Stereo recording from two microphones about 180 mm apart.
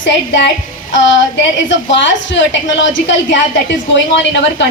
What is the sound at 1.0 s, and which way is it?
A woman's voice, 90° left.